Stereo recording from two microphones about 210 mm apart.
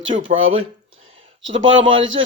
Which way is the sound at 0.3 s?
70° right (ahead or behind).